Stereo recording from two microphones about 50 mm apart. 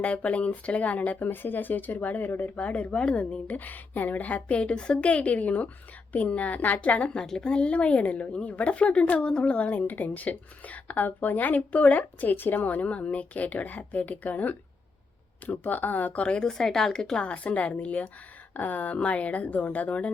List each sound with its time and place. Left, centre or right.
0.0 s speech: left
2.6 s a woman's voice: left
7.2 s a woman's voice: centre
17.2 s a woman's voice: left